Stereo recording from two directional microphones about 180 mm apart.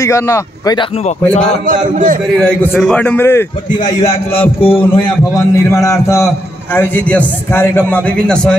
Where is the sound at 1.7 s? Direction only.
50° right (ahead or behind).